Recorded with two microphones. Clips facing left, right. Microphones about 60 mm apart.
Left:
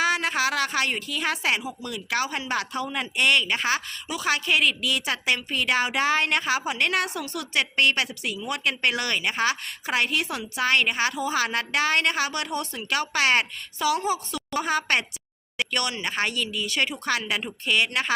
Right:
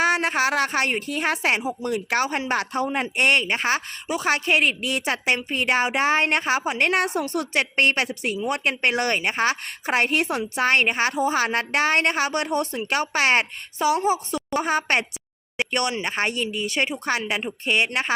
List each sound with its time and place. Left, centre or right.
0.0 s speech: right